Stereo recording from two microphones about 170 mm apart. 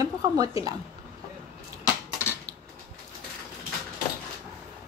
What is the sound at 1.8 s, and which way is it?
Cutlery, 15° left (ahead or behind).